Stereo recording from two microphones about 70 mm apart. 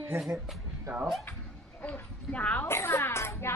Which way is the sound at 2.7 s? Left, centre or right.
Left.